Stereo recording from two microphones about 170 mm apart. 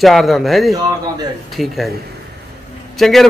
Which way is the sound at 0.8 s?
20° right (ahead or behind).